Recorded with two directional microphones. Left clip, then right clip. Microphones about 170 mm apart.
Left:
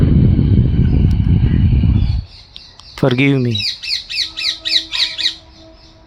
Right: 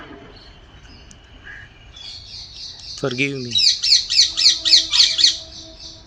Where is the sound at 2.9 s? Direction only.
65° left (ahead or behind).